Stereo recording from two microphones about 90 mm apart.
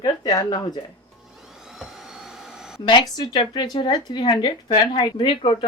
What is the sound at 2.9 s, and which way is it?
A woman's voice, 55° left (ahead or behind).